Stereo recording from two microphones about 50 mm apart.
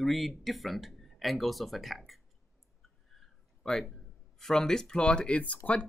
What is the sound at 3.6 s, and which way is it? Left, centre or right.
Speech, centre.